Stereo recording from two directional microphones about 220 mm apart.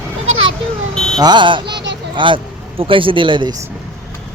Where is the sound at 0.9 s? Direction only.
Centre (ahead or behind).